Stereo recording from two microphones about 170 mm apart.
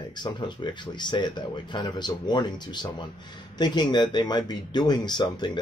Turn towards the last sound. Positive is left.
turn(degrees=25)  # may be behind; listen again after turning